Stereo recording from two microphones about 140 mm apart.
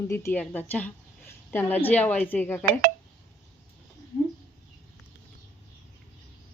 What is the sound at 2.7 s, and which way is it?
Speech, 90° right.